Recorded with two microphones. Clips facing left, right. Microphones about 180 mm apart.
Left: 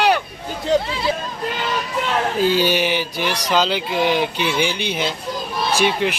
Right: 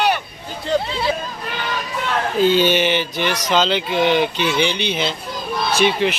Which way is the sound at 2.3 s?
5° left (ahead or behind).